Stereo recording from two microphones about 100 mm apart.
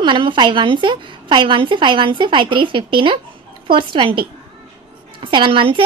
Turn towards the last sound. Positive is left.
turn(degrees=-60)  # may be behind; listen again after turning